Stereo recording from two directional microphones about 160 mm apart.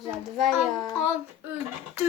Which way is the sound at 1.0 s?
15° right (ahead or behind).